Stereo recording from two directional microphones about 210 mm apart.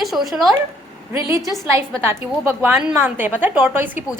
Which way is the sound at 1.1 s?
15° right (ahead or behind).